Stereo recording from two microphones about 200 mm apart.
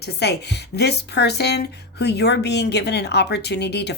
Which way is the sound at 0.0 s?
55° left (ahead or behind).